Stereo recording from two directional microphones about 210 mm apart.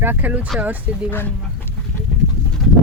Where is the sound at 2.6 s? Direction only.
Centre (ahead or behind).